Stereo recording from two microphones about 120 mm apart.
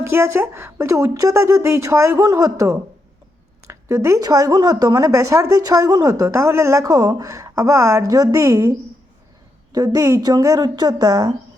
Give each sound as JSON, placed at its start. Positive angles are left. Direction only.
{"t": 0.0, "sound": "speech", "side_deg": -20}
{"t": 9.7, "sound": "speech", "side_deg": -30}